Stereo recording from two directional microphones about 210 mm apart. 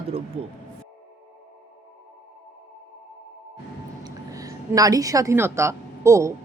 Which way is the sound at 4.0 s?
15° right (ahead or behind).